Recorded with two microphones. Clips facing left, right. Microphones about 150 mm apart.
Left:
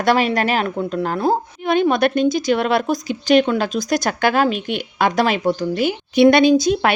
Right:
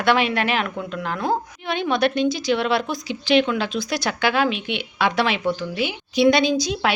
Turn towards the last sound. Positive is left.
turn(degrees=50)  # may be behind; listen again after turning